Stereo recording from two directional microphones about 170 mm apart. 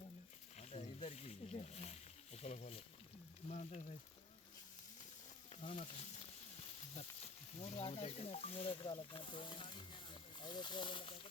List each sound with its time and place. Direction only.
0.5 s wild animals: 40° left (ahead or behind)
3.5 s speech: 40° left (ahead or behind)
5.6 s speech: 35° left (ahead or behind)
7.6 s speech: 35° left (ahead or behind)